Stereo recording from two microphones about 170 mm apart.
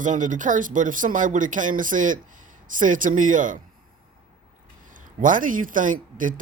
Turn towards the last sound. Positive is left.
turn(degrees=-50)  # may be behind; listen again after turning